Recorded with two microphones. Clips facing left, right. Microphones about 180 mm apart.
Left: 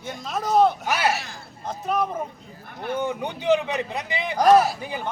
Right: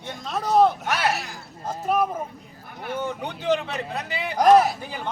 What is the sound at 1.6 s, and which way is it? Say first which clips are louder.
Speech: right 2 dB; 5° right (ahead or behind).